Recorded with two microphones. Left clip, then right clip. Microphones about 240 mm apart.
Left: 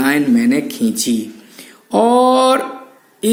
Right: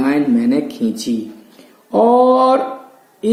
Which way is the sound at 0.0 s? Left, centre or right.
Left.